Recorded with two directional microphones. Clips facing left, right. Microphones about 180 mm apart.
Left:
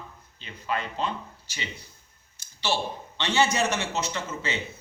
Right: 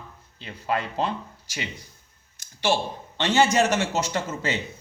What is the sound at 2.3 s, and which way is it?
A man's voice, 50° right (ahead or behind).